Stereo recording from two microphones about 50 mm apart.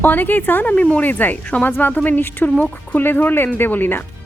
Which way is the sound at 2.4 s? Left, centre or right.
Left.